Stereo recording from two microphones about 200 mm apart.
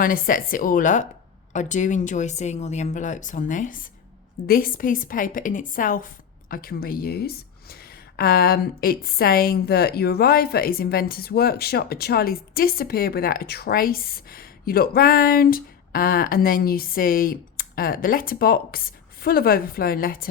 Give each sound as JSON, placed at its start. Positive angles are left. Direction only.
{"t": 0.0, "sound": "speech", "side_deg": 45}